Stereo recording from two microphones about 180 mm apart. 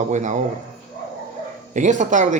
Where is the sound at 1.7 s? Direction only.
45° right (ahead or behind).